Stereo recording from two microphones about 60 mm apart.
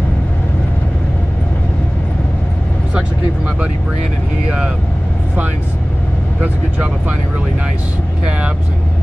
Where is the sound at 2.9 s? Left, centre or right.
Centre.